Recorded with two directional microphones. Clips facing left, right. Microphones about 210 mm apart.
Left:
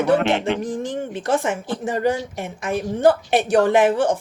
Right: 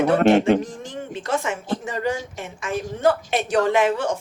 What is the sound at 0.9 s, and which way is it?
A woman's voice, 55° left (ahead or behind).